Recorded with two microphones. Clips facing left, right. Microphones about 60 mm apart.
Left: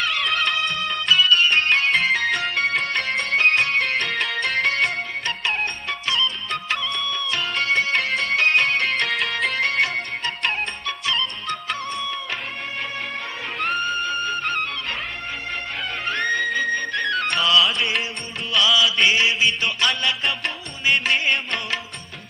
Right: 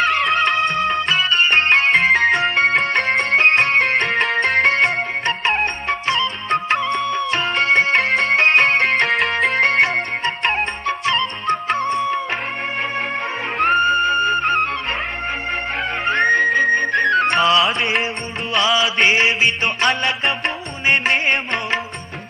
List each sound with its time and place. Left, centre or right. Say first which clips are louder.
0.0 s music: right 6 dB; right
13.6 s music: right 9 dB; right
16.0 s music: right 7 dB; right
17.6 s music: right 3 dB; right
18.5 s music: right 2 dB; right
19.5 s music: right 4 dB; right